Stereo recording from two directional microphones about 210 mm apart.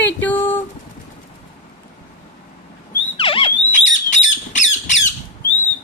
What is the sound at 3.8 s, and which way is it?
Squawk, 35° left (ahead or behind).